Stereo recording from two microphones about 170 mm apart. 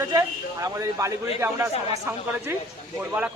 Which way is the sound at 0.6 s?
20° right (ahead or behind).